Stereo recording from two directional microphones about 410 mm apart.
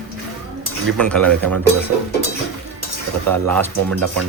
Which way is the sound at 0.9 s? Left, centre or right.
Centre.